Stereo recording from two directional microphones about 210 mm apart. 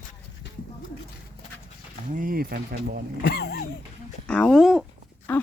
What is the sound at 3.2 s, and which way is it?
Speech, 50° left (ahead or behind).